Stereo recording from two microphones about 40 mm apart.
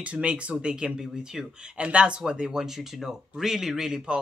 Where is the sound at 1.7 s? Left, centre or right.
Right.